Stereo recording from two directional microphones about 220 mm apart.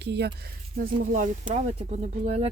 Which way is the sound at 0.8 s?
35° right (ahead or behind).